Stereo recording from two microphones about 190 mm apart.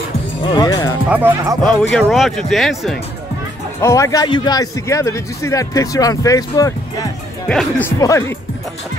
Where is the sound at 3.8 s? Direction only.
15° left (ahead or behind).